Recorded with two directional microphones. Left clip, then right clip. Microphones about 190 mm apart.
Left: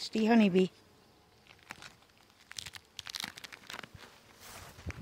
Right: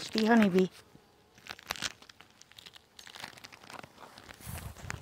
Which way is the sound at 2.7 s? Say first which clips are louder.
Left 4 dB; 25° left (ahead or behind).